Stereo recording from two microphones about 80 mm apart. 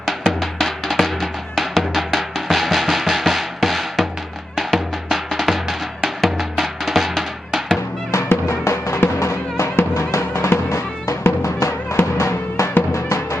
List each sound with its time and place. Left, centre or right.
0.3 s music: centre
8.3 s music: left